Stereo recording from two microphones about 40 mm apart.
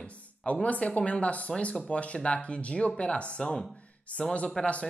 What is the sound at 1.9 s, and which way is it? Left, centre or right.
Speech, left.